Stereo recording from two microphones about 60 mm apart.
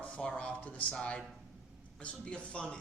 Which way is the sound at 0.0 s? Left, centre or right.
Centre.